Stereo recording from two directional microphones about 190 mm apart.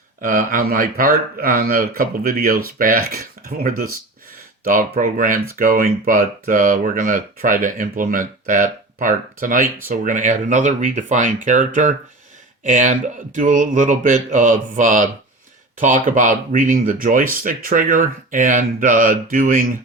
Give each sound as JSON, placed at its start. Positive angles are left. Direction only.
{"t": 0.2, "sound": "speech", "side_deg": -45}
{"t": 4.6, "sound": "speech", "side_deg": -45}